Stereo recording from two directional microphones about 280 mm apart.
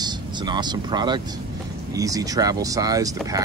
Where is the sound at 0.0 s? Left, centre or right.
Centre.